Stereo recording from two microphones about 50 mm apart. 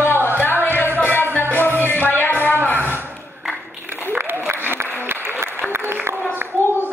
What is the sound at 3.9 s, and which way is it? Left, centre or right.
Applause, right.